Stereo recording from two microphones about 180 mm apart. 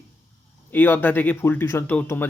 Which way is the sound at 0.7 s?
10° left (ahead or behind).